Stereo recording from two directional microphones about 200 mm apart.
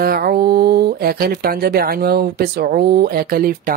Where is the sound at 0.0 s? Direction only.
50° right (ahead or behind).